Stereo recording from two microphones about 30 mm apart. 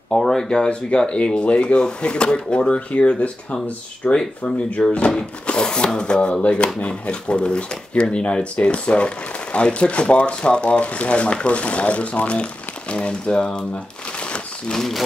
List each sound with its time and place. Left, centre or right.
0.1 s speech: centre
0.7 s speech: left
4.0 s speech: left
5.5 s speech: left